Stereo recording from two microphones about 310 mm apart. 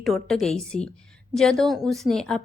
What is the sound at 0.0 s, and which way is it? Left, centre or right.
A woman's voice, centre.